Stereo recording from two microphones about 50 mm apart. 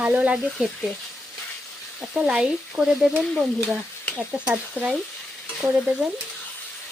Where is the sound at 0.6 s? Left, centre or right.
Centre.